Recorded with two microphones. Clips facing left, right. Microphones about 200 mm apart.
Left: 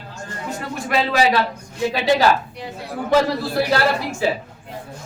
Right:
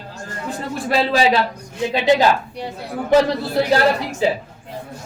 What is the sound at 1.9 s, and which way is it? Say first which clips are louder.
A man's voice: right 2 dB; 20° right (ahead or behind).